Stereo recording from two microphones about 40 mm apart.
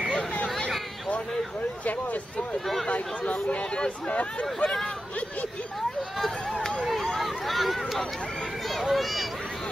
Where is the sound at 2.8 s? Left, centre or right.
Left.